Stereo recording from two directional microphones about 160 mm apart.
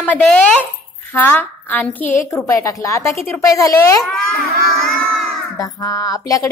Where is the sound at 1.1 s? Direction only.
10° left (ahead or behind).